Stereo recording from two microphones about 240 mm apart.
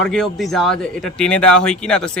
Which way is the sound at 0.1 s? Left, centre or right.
Centre.